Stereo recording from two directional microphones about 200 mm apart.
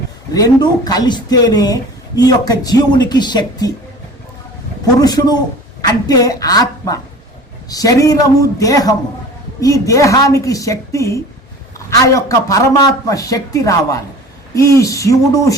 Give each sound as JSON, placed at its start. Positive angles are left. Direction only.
{"t": 0.3, "sound": "speech", "side_deg": 20}
{"t": 4.9, "sound": "a man's voice", "side_deg": 20}